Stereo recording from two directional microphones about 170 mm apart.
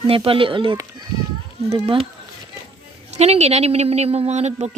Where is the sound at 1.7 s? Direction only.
30° right (ahead or behind).